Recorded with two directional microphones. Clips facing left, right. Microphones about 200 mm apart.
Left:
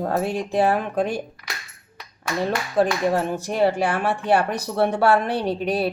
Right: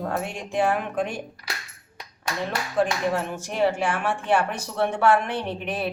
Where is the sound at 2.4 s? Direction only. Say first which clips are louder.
Left 4 dB; 35° left (ahead or behind).